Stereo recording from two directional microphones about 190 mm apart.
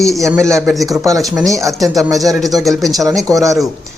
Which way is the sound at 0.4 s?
15° right (ahead or behind).